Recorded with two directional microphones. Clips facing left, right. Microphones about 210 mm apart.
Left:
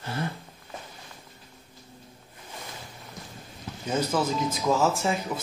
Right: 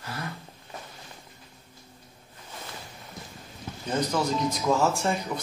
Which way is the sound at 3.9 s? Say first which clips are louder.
Even; 5° left (ahead or behind).